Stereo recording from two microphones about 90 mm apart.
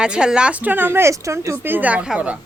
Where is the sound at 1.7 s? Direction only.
15° right (ahead or behind).